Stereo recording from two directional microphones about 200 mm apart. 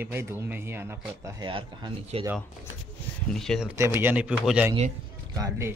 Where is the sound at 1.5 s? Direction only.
25° right (ahead or behind).